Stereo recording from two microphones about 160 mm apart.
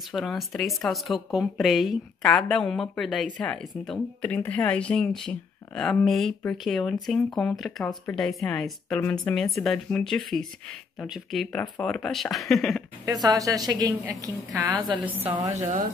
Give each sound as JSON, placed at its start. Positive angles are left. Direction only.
{"t": 0.1, "sound": "speech", "side_deg": 0}
{"t": 13.0, "sound": "a woman's voice", "side_deg": -25}
{"t": 15.0, "sound": "a woman's voice", "side_deg": -10}